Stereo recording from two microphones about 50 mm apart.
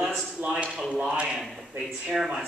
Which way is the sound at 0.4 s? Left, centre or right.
Right.